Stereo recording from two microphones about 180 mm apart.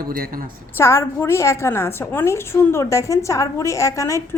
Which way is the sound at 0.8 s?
15° left (ahead or behind).